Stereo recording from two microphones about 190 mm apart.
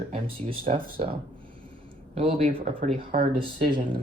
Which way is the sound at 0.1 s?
30° right (ahead or behind).